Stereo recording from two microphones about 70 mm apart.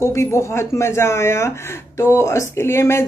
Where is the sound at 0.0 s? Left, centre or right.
Left.